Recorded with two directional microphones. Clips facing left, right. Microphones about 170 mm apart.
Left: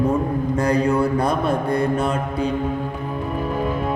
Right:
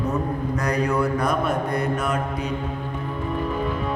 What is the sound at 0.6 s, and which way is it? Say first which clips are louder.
Mantra: left 4 dB; 30° left (ahead or behind).